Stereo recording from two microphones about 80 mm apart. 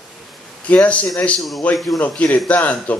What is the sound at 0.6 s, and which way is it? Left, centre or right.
Speech, centre.